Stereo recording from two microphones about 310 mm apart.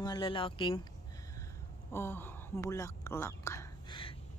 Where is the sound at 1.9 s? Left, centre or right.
Centre.